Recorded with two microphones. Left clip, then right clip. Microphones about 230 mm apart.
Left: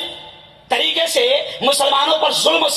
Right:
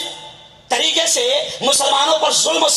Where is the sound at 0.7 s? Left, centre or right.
Left.